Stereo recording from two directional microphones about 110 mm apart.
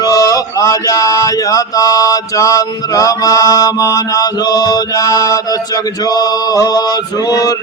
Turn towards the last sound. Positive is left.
turn(degrees=35)  # may be behind; listen again after turning